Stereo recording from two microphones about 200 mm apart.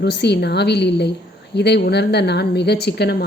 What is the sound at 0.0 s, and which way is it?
A woman's voice, 55° left (ahead or behind).